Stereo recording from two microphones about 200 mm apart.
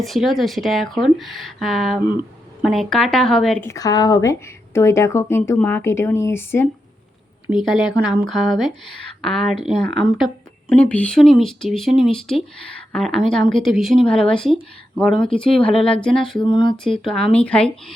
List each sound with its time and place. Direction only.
0.0 s speech: centre (ahead or behind)
7.5 s speech: centre (ahead or behind)
15.6 s a sound: 30° left (ahead or behind)
15.9 s speech: 5° left (ahead or behind)
16.4 s a sound: 20° left (ahead or behind)
16.7 s speech: centre (ahead or behind)